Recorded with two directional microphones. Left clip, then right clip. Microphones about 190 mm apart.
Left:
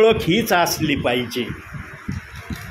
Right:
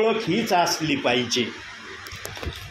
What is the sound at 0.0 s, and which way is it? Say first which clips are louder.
Speech: left 6 dB; 35° left (ahead or behind).